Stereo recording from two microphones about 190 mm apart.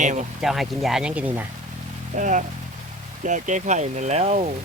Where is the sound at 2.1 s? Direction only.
40° right (ahead or behind).